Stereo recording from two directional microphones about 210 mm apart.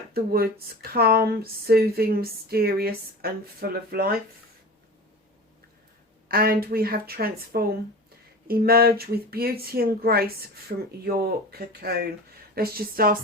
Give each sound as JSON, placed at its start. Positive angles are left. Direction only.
{"t": 0.1, "sound": "speech", "side_deg": -45}
{"t": 6.2, "sound": "speech", "side_deg": -45}